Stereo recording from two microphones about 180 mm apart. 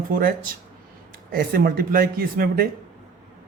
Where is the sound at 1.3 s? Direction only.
55° right (ahead or behind).